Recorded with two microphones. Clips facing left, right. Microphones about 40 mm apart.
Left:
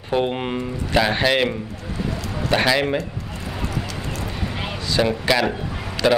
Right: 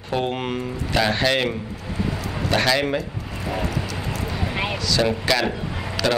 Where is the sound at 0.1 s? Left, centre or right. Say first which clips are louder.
Left 2 dB; centre.